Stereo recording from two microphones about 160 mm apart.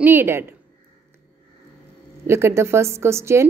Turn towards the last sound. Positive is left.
turn(degrees=-15)  # may be behind; listen again after turning